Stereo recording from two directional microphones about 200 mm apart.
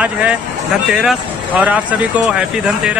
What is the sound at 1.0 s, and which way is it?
Speech, 5° right (ahead or behind).